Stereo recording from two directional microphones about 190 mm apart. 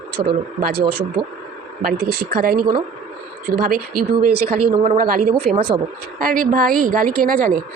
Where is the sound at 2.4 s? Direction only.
50° right (ahead or behind).